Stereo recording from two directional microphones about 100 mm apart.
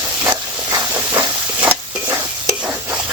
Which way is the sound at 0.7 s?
35° right (ahead or behind).